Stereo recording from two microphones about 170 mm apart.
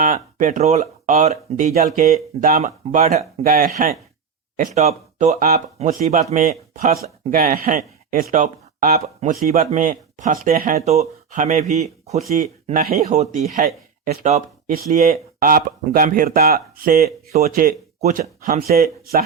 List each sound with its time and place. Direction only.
0.0 s speech: 50° right (ahead or behind)
3.5 s speech: 50° right (ahead or behind)
9.5 s speech: 45° right (ahead or behind)
10.8 s speech: 40° right (ahead or behind); by 19.2 s 60° right (ahead or behind)